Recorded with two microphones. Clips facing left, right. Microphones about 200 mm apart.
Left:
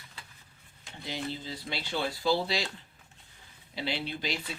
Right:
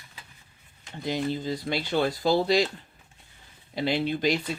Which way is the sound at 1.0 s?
50° right (ahead or behind).